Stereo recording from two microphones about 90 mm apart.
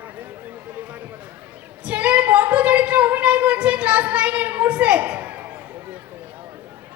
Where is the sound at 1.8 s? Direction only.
15° right (ahead or behind).